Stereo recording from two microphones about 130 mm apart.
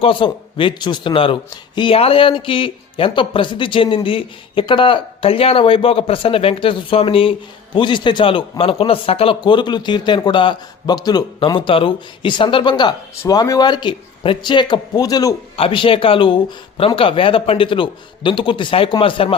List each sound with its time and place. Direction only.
0.0 s speech: 40° left (ahead or behind)
11.3 s speech: 40° left (ahead or behind)
15.5 s speech: 45° left (ahead or behind)